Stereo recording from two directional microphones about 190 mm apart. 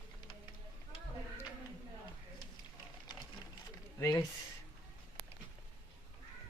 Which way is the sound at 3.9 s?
20° left (ahead or behind).